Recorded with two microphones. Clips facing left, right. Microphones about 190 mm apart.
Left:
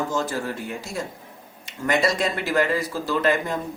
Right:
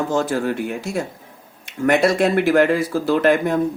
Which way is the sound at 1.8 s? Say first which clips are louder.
Right 6 dB; 60° right (ahead or behind).